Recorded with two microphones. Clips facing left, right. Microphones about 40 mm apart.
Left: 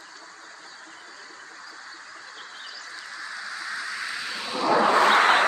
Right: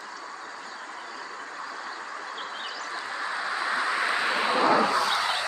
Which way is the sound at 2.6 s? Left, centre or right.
Right.